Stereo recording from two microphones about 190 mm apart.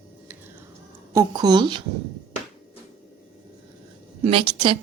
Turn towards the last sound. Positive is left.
turn(degrees=-25)  # may be behind; listen again after turning